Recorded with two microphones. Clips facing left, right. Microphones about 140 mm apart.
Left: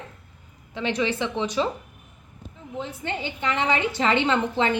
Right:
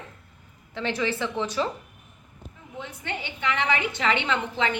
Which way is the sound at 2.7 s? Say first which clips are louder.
Left 4 dB; 30° left (ahead or behind).